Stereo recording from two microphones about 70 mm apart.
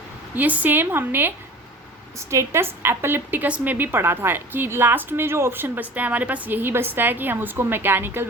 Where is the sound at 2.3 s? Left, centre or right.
Right.